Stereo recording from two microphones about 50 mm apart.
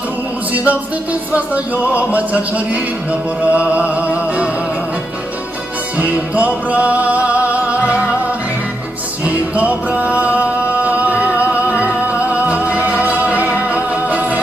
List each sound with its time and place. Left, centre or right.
0.5 s music: right
6.0 s music: right
9.2 s music: right
12.3 s music: right